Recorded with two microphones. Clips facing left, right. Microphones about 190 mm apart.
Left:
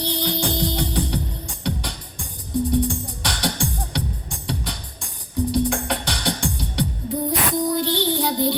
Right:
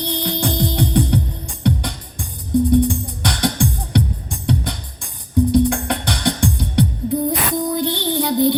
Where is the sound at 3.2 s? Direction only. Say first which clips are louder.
Right 6 dB; 60° right (ahead or behind).